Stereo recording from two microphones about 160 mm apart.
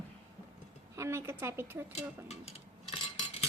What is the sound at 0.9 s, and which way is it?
Speech, 15° right (ahead or behind).